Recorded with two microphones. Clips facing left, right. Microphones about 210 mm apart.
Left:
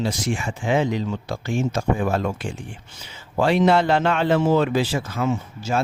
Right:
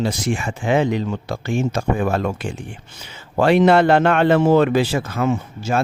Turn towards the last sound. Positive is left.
turn(degrees=-60)  # may be behind; listen again after turning